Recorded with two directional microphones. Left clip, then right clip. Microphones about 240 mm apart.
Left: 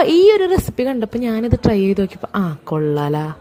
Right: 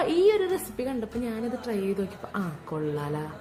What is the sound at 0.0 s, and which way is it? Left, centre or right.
A woman's voice, left.